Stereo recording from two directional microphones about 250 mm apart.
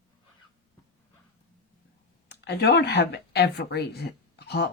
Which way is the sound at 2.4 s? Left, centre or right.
Left.